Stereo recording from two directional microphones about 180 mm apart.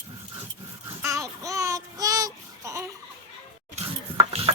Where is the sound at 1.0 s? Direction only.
15° right (ahead or behind).